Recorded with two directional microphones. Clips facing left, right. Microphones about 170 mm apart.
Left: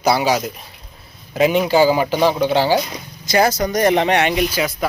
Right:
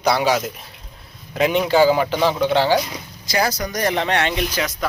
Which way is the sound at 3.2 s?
25° left (ahead or behind).